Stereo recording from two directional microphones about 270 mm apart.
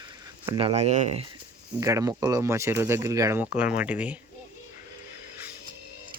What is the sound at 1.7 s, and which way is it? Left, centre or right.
Speech, centre.